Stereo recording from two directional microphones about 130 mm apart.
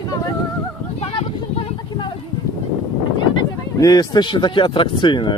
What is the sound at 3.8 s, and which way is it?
Speech, 30° left (ahead or behind).